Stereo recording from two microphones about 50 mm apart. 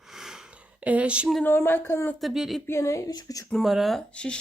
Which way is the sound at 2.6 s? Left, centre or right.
Left.